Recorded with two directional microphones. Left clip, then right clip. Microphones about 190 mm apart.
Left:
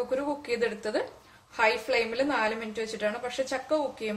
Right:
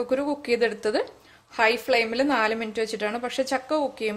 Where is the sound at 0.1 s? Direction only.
55° right (ahead or behind).